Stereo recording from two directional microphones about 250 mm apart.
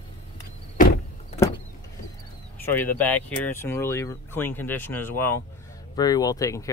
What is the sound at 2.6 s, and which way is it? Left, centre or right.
Speech, centre.